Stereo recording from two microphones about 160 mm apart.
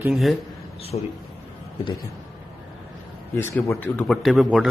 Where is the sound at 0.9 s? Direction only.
40° left (ahead or behind).